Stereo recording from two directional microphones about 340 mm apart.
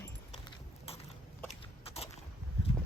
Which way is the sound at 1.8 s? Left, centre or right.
Centre.